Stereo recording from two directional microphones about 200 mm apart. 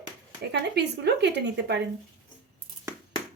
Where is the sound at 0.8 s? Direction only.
60° right (ahead or behind).